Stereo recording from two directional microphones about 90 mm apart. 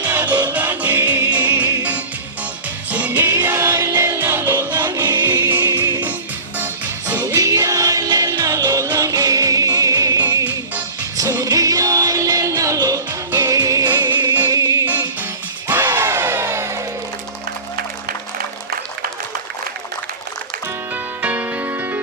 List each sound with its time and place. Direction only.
0.0 s music: 20° right (ahead or behind)
2.9 s music: 20° right (ahead or behind)
5.6 s music: 40° right (ahead or behind)
7.1 s music: 20° right (ahead or behind)
7.3 s music: 40° right (ahead or behind)
13.8 s music: 55° right (ahead or behind)
15.6 s music: 25° right (ahead or behind)
20.9 s music: 15° right (ahead or behind)